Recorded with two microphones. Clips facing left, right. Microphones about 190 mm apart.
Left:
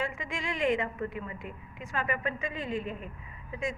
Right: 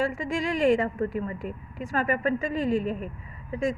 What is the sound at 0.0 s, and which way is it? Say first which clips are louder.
A woman's voice: right 8 dB; 40° right (ahead or behind).